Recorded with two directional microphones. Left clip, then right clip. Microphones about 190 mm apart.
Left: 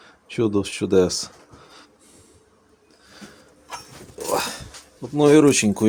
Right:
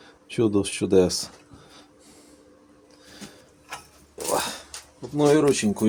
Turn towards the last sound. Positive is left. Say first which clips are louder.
# left 5 dB
turn(degrees=45)  # may be behind; listen again after turning